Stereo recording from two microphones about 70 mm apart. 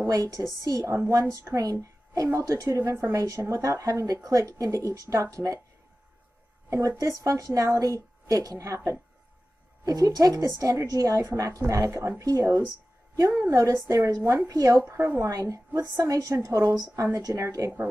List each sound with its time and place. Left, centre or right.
0.0 s a woman's voice: right
7.0 s a woman's voice: right
13.3 s a woman's voice: right